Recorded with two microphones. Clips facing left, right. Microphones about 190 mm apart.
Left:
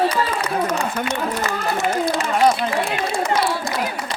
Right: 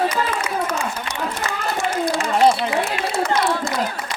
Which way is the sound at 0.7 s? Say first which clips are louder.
Left 3 dB; 35° left (ahead or behind).